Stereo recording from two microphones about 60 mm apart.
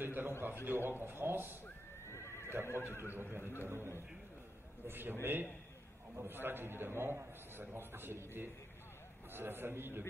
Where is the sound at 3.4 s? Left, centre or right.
Left.